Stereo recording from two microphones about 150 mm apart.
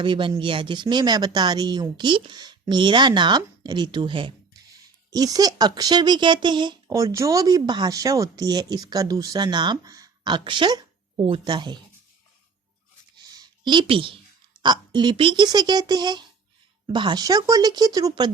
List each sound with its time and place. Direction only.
0.0 s speech: 35° right (ahead or behind)
13.2 s a sound: 25° right (ahead or behind)
14.6 s speech: 30° right (ahead or behind)